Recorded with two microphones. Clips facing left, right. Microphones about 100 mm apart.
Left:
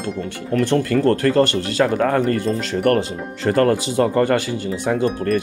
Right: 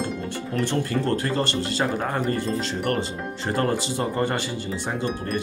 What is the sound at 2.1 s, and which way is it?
Speech, 55° left (ahead or behind).